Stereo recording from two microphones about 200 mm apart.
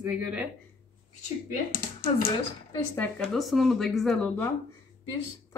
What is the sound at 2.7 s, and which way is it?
Speech, 10° left (ahead or behind).